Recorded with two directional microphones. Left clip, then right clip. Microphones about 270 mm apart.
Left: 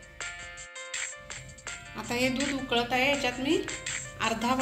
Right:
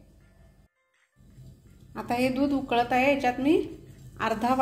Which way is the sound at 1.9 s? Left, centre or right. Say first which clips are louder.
Right 3 dB; right.